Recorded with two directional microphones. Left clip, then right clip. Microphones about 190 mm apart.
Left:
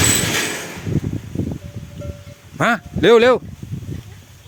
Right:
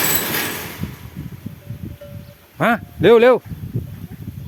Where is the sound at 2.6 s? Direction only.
15° left (ahead or behind).